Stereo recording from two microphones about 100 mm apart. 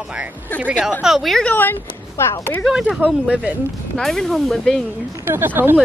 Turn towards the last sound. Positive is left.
turn(degrees=-20)  # may be behind; listen again after turning